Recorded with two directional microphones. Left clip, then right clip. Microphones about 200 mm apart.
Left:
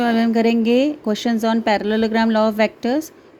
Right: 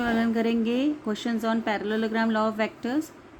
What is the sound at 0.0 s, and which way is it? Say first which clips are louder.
A woman's voice: left 8 dB; 35° left (ahead or behind).